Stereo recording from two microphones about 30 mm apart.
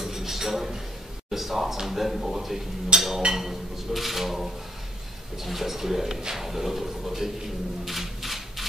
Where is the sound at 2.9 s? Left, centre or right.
Right.